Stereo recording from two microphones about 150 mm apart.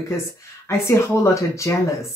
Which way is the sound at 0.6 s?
20° left (ahead or behind).